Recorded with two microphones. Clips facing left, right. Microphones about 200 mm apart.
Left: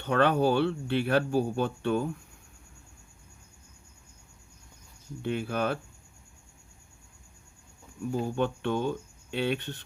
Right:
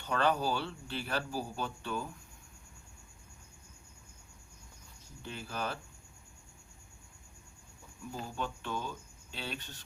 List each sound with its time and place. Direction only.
0.0 s speech: 60° left (ahead or behind)
5.2 s speech: 60° left (ahead or behind)
8.3 s speech: 60° left (ahead or behind)